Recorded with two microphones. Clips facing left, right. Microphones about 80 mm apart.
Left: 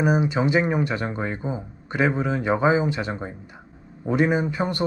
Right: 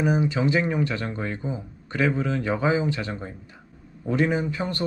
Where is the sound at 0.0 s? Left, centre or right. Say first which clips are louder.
Left 2 dB; centre.